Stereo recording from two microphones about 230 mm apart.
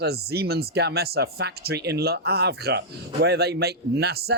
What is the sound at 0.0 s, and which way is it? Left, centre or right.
Speech, right.